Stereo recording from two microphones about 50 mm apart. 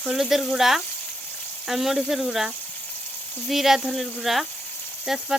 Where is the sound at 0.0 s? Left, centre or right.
Centre.